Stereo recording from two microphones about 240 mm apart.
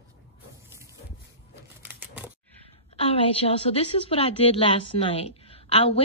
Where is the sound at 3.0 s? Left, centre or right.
Left.